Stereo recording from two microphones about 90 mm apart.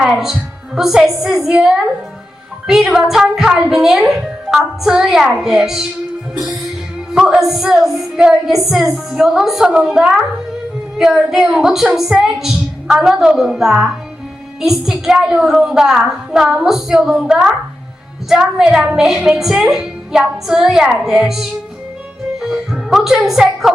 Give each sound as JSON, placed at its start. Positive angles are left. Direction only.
{"t": 0.0, "sound": "a woman's voice", "side_deg": -5}
{"t": 7.1, "sound": "a woman's voice", "side_deg": -5}
{"t": 18.5, "sound": "a woman's voice", "side_deg": -5}